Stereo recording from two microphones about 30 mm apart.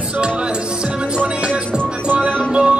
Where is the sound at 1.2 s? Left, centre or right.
Right.